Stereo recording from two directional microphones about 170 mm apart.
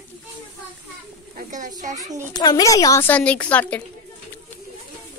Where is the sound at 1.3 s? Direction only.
50° right (ahead or behind).